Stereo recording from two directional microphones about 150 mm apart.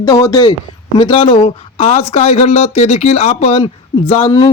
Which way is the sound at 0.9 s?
35° left (ahead or behind).